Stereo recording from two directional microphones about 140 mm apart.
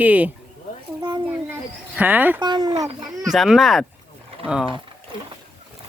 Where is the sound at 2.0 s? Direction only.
10° right (ahead or behind).